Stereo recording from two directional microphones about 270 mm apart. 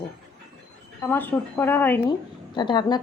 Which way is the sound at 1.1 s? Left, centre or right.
Centre.